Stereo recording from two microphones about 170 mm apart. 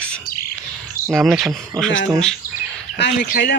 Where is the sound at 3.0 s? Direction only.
90° left.